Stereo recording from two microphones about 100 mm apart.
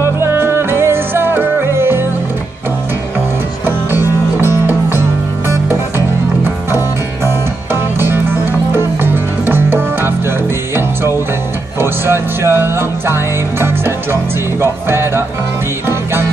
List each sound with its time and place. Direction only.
0.0 s music: 25° right (ahead or behind)
3.6 s music: 20° right (ahead or behind)
8.0 s music: 20° right (ahead or behind)
11.8 s music: 25° right (ahead or behind)